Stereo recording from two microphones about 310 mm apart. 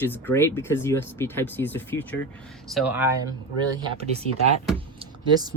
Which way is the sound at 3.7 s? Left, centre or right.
Centre.